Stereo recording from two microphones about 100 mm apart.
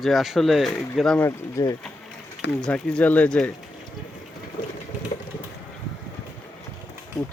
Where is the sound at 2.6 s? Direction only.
5° left (ahead or behind).